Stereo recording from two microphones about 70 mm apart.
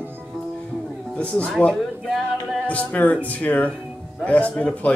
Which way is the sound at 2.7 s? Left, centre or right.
Left.